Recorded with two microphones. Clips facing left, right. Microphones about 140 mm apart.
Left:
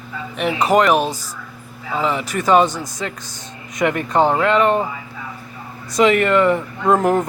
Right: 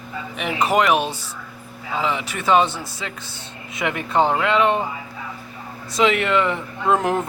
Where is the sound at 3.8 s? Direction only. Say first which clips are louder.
Left 3 dB; 5° left (ahead or behind).